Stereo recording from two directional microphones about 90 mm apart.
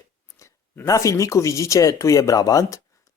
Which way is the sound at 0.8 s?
35° left (ahead or behind).